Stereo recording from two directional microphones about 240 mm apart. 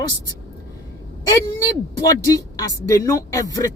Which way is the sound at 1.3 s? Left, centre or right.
Centre.